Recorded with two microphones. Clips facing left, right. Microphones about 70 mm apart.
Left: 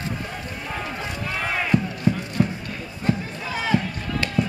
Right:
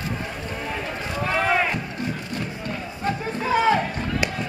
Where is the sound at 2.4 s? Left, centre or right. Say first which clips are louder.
Left 9 dB; left.